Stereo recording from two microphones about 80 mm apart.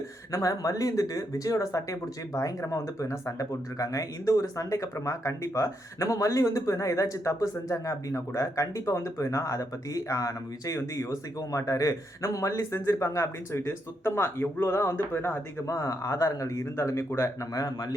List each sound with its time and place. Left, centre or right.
0.3 s speech: left
15.6 s speech: left
17.5 s a man's voice: left